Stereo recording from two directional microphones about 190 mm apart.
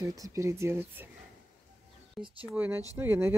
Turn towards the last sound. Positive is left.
turn(degrees=-10)  # may be behind; listen again after turning